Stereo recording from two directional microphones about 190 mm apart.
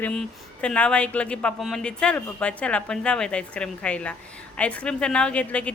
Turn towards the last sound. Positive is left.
turn(degrees=5)  # may be behind; listen again after turning